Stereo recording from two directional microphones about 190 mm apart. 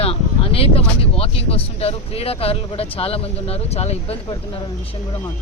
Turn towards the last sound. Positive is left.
turn(degrees=35)  # may be behind; listen again after turning